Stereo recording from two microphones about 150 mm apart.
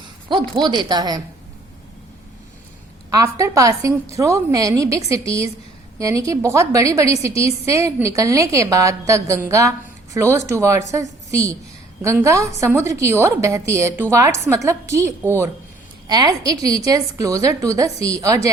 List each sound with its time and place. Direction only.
0.3 s a woman's voice: 30° right (ahead or behind)
3.1 s a woman's voice: 20° right (ahead or behind)